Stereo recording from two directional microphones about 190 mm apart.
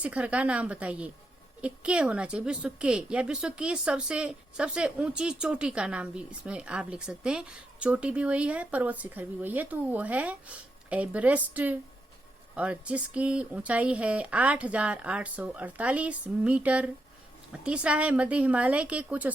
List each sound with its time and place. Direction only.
0.0 s a woman's voice: 5° right (ahead or behind)